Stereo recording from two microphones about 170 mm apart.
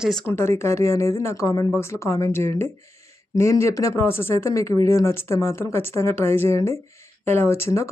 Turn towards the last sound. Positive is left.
turn(degrees=15)  # may be behind; listen again after turning